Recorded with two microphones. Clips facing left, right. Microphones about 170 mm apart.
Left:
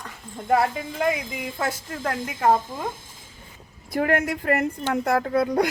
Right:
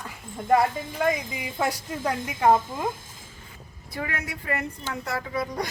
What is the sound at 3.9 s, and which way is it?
A woman's voice, 50° left (ahead or behind).